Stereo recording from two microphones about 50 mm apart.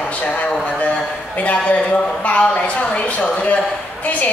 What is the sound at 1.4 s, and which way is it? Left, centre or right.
Speech, left.